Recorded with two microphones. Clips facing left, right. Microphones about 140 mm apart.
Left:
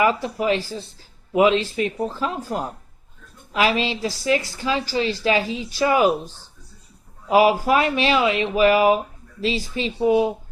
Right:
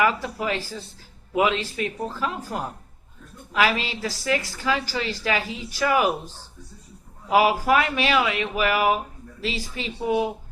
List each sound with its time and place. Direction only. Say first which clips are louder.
0.0 s a woman's voice: left 3 dB; 20° left (ahead or behind)
7.3 s a woman's voice: left 3 dB; 25° left (ahead or behind)